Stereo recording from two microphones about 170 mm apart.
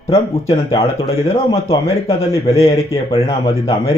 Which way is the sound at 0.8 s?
35° left (ahead or behind).